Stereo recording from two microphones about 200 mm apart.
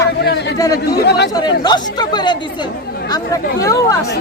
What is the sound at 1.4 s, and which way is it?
Speech, 20° left (ahead or behind).